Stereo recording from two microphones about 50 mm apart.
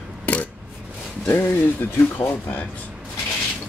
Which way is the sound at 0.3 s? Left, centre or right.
Left.